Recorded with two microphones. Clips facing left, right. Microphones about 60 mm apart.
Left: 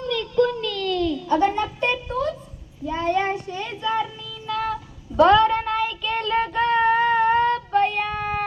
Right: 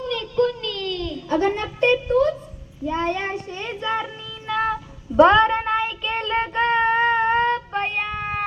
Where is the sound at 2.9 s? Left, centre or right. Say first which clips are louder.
Left 2 dB; right.